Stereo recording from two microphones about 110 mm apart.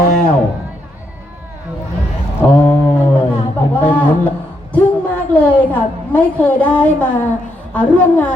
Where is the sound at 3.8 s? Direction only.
10° left (ahead or behind).